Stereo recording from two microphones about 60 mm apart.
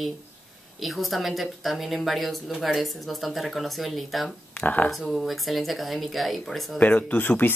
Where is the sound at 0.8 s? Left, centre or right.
Centre.